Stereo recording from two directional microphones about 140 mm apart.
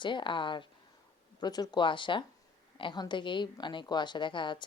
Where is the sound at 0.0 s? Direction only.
35° left (ahead or behind).